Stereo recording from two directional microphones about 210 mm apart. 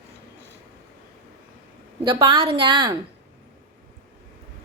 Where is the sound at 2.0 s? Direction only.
25° right (ahead or behind).